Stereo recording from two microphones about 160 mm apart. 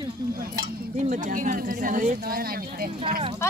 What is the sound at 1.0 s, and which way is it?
Speech, 55° right (ahead or behind).